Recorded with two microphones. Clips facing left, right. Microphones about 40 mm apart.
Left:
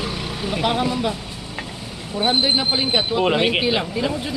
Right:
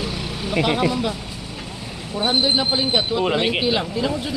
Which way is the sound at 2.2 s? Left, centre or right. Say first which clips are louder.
Even; centre.